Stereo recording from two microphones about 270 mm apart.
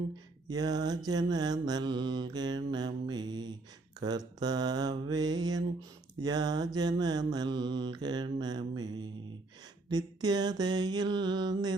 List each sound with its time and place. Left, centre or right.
0.5 s mantra: centre